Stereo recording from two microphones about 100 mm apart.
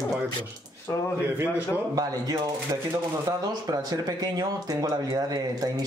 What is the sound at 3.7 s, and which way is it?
Speech, 40° right (ahead or behind).